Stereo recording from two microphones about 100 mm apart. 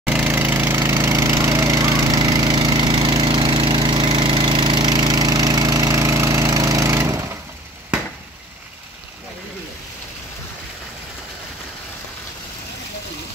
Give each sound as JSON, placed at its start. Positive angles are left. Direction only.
{"t": 0.1, "sound": "engine", "side_deg": -15}
{"t": 0.7, "sound": "a sound", "side_deg": -25}
{"t": 2.8, "sound": "lawn mower", "side_deg": -45}
{"t": 3.8, "sound": "engine", "side_deg": -50}
{"t": 4.2, "sound": "engine", "side_deg": -60}